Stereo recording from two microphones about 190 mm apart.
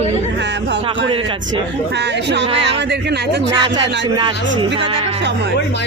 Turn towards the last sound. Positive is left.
turn(degrees=-30)  # may be behind; listen again after turning